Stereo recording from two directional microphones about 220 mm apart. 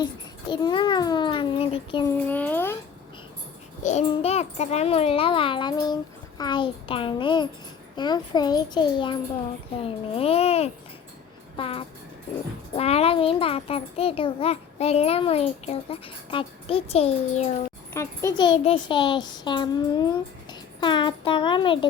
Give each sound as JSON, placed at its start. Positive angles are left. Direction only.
{"t": 0.0, "sound": "a child's voice", "side_deg": 20}
{"t": 2.0, "sound": "a child's voice", "side_deg": 10}
{"t": 3.8, "sound": "a child's voice", "side_deg": 30}
{"t": 17.9, "sound": "a child's voice", "side_deg": 10}